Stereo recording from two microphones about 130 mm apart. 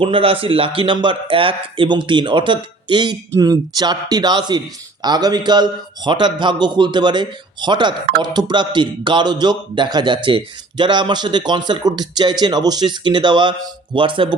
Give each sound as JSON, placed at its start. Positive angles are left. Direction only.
{"t": 0.0, "sound": "a man's voice", "side_deg": -45}